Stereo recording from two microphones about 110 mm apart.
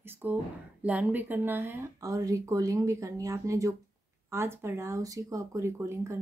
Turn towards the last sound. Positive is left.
turn(degrees=-25)  # may be behind; listen again after turning